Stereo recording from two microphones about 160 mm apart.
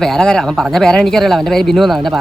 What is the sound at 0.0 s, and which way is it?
Speech, 5° left (ahead or behind).